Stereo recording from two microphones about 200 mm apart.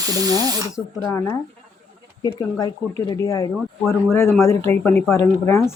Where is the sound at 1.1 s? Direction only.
15° left (ahead or behind).